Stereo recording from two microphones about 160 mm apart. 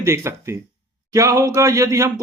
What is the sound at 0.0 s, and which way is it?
Speech, 15° right (ahead or behind).